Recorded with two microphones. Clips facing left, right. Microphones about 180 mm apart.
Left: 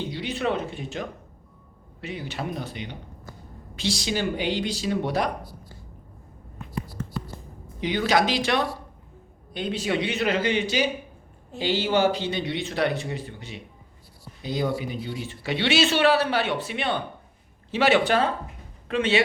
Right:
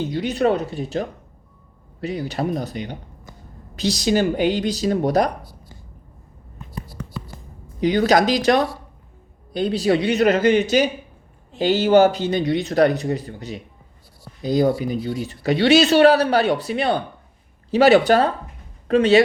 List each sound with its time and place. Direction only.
0.1 s speech: 45° right (ahead or behind)
7.8 s speech: 40° right (ahead or behind)